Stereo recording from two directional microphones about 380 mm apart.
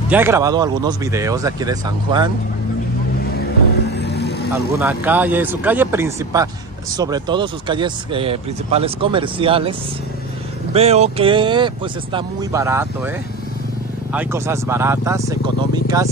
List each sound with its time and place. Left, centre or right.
0.1 s speech: centre
3.9 s vehicle: left
4.7 s speech: centre
14.1 s speech: centre